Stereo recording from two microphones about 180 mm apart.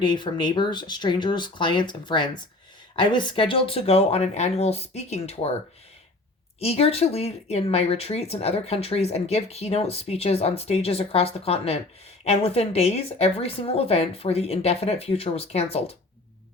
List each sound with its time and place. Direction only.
0.0 s speech: 25° left (ahead or behind)
6.6 s speech: 35° left (ahead or behind)